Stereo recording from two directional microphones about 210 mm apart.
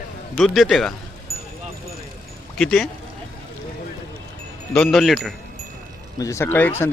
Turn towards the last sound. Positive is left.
turn(degrees=10)  # may be behind; listen again after turning